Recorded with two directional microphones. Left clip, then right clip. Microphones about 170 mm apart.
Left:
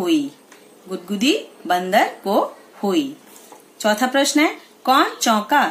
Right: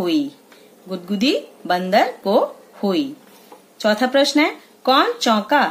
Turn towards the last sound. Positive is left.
turn(degrees=-45)  # may be behind; listen again after turning